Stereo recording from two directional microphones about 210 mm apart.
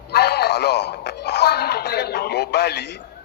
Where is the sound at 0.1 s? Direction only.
50° left (ahead or behind).